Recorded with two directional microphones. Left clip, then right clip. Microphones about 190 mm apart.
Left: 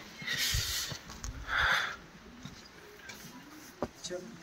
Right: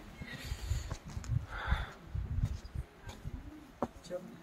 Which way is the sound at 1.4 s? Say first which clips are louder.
Left 13 dB; 5° right (ahead or behind).